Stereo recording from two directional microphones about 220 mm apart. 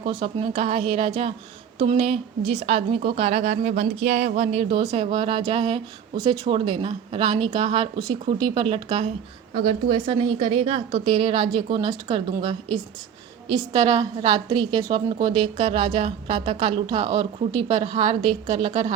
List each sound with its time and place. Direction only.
0.0 s a woman's voice: 25° right (ahead or behind)
13.6 s a woman's voice: 20° right (ahead or behind)